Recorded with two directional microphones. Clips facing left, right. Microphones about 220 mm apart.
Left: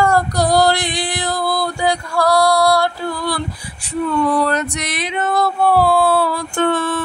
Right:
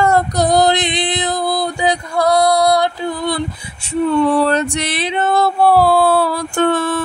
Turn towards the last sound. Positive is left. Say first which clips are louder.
# right 2 dB
turn(degrees=-40)  # may be behind; listen again after turning